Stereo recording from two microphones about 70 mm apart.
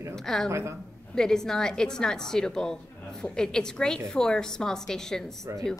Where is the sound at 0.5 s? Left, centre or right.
Right.